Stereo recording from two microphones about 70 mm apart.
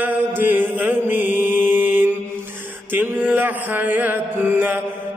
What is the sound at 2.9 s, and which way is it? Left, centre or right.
Music, right.